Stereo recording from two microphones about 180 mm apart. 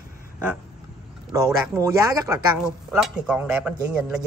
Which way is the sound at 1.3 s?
15° right (ahead or behind).